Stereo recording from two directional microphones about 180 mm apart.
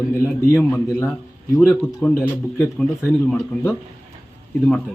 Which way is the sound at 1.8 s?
5° left (ahead or behind).